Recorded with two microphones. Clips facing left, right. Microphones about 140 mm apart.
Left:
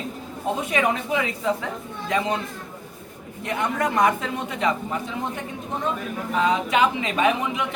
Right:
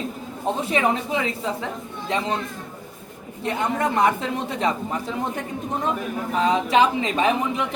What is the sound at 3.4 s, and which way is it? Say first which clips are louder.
Speech: right 1 dB; 30° right (ahead or behind).